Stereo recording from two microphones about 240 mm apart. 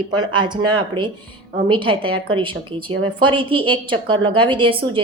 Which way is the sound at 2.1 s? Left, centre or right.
Right.